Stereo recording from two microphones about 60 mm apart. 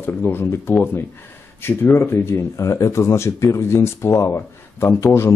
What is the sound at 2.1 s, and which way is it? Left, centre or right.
Speech, left.